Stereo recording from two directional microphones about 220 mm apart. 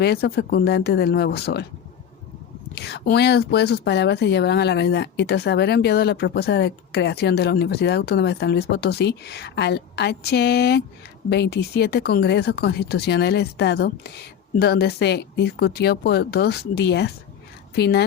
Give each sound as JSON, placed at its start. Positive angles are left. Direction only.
{"t": 0.0, "sound": "speech", "side_deg": 45}
{"t": 2.7, "sound": "speech", "side_deg": 50}